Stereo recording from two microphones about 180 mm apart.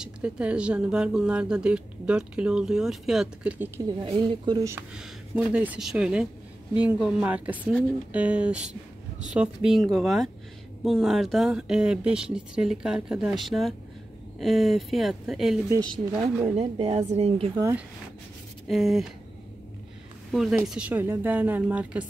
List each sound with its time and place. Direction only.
0.0 s speech: 5° right (ahead or behind)
4.0 s speech: 30° right (ahead or behind)
4.9 s speech: 5° right (ahead or behind)
16.4 s a woman's voice: 35° right (ahead or behind)
17.6 s speech: 15° right (ahead or behind)
18.7 s speech: centre (ahead or behind)
20.2 s speech: centre (ahead or behind)